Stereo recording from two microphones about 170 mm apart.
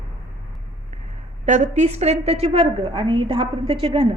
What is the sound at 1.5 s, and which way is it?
A woman's voice, 40° right (ahead or behind).